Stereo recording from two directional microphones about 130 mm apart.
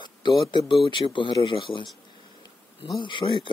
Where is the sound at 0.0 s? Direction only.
35° left (ahead or behind).